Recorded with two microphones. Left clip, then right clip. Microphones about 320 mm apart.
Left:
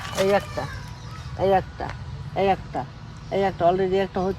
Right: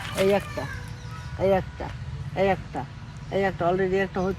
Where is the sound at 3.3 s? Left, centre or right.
Left.